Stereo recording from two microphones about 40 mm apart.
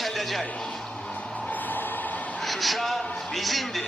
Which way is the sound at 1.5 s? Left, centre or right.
Left.